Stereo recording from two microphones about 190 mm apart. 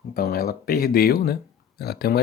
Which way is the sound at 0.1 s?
55° left (ahead or behind).